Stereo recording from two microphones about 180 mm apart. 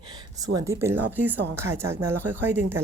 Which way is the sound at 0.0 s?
20° right (ahead or behind).